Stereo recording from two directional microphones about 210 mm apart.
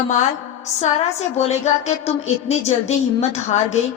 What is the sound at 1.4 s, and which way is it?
A woman's voice, 30° left (ahead or behind).